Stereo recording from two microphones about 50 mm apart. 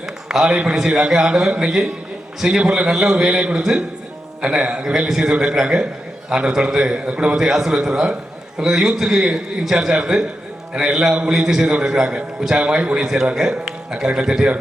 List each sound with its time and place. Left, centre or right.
0.3 s a man's voice: centre